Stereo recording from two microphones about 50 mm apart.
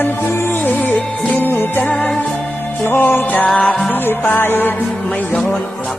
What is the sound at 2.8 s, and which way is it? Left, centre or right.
Music, left.